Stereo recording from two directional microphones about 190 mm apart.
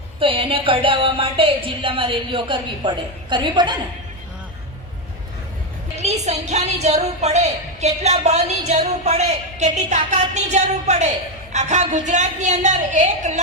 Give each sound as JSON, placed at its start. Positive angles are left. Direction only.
{"t": 0.2, "sound": "speech", "side_deg": -25}
{"t": 6.2, "sound": "a woman's voice", "side_deg": -35}